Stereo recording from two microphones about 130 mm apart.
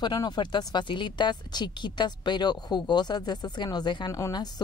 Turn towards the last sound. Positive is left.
turn(degrees=30)  # may be behind; listen again after turning